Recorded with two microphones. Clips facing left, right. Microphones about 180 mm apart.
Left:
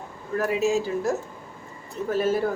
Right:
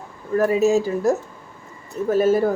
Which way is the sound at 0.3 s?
40° right (ahead or behind).